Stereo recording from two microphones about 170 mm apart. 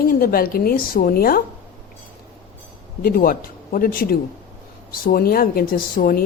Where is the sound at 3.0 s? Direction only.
55° left (ahead or behind).